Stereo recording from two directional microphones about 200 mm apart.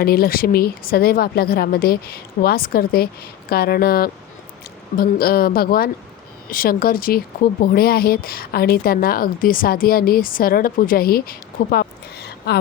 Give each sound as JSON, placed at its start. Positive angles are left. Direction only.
{"t": 0.0, "sound": "a woman's voice", "side_deg": 50}